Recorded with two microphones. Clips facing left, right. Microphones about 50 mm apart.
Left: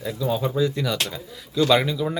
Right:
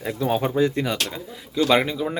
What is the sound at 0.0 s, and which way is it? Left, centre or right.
Speech, right.